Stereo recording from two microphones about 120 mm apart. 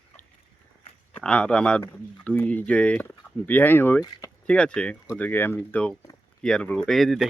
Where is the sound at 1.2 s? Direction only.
10° left (ahead or behind).